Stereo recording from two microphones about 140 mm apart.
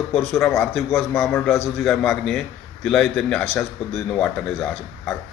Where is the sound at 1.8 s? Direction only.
Centre (ahead or behind).